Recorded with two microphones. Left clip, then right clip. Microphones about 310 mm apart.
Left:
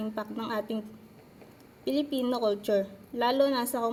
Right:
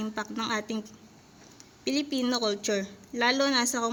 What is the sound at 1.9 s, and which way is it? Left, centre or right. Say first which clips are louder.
Speech: even; right.